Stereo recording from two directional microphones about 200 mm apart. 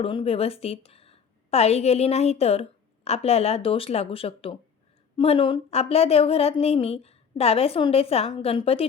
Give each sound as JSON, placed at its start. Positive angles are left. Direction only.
{"t": 0.0, "sound": "a woman's voice", "side_deg": 25}